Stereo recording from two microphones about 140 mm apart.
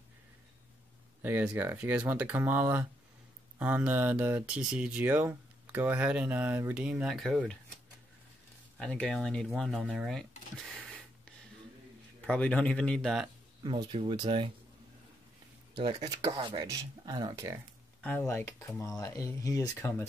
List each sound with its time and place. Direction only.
1.2 s speech: 10° right (ahead or behind)
8.7 s speech: 5° left (ahead or behind)
12.3 s speech: 10° left (ahead or behind)
13.9 s speech: 35° right (ahead or behind)
16.0 s speech: 30° right (ahead or behind)
18.0 s speech: 15° left (ahead or behind)